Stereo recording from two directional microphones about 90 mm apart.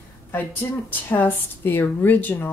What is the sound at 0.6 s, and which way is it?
Speech, 35° left (ahead or behind).